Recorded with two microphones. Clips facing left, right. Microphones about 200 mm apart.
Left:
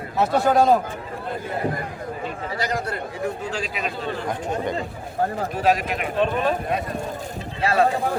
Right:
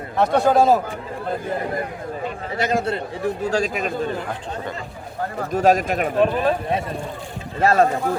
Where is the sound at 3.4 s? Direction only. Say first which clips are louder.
Right 6 dB; 40° right (ahead or behind).